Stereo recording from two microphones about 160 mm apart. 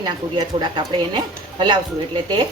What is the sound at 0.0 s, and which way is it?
Speech, 25° right (ahead or behind).